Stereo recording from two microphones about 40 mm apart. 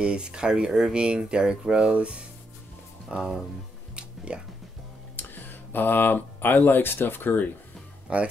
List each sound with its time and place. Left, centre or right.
0.0 s speech: right
3.9 s music: right
5.1 s speech: left
8.1 s speech: right